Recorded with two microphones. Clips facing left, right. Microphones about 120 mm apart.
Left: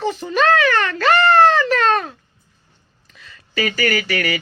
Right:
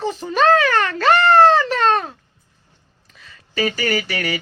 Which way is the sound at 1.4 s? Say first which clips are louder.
Right 1 dB; 35° right (ahead or behind).